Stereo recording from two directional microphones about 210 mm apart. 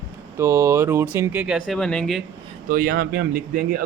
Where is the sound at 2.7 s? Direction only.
45° right (ahead or behind).